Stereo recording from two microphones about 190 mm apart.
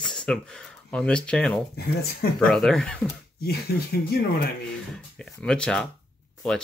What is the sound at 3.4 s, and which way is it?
Speech, 55° left (ahead or behind).